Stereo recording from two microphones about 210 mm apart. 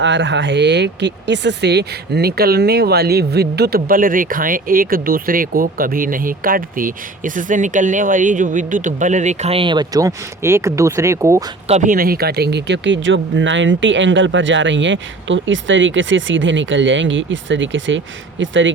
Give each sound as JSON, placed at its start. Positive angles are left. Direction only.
{"t": 0.0, "sound": "speech", "side_deg": -60}
{"t": 11.7, "sound": "speech", "side_deg": -40}